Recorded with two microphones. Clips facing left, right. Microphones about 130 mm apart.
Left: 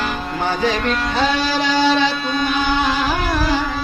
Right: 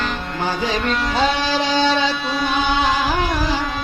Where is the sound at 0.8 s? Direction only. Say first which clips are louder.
Even; centre (ahead or behind).